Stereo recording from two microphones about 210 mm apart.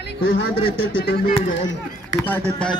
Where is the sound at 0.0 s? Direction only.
60° left (ahead or behind).